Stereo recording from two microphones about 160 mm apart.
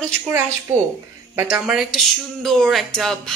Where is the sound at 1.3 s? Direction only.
15° right (ahead or behind).